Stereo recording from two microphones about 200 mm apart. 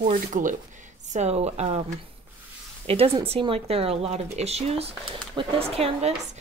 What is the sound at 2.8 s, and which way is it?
Speech, 30° right (ahead or behind).